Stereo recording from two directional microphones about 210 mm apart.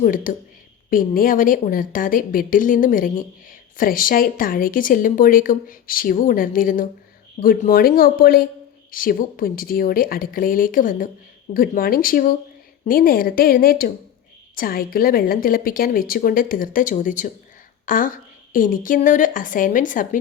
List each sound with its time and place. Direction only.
0.0 s a woman's voice: 40° left (ahead or behind)